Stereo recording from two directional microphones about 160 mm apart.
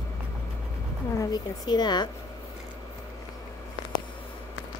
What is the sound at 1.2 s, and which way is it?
Speech, 25° left (ahead or behind).